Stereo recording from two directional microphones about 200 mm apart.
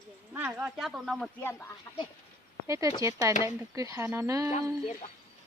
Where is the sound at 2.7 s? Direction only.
15° right (ahead or behind).